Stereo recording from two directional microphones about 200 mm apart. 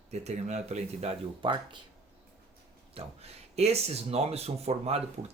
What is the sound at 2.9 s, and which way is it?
Speech, 30° right (ahead or behind).